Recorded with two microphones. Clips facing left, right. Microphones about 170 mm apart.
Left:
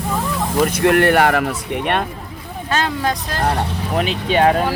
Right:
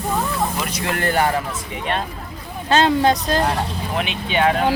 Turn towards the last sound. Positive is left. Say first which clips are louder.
# left 4 dB
turn(degrees=40)  # may be behind; listen again after turning